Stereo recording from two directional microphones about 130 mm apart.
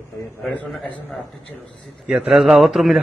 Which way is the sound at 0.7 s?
5° left (ahead or behind).